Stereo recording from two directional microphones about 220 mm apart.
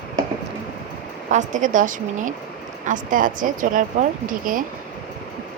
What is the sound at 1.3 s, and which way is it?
Speech, 35° right (ahead or behind).